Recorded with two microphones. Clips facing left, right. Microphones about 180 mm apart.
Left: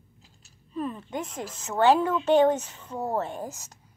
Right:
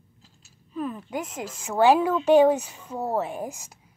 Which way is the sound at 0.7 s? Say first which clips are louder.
Right 1 dB; 5° right (ahead or behind).